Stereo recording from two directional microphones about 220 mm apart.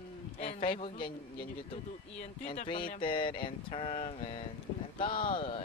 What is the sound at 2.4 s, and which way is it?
Speech, 30° left (ahead or behind).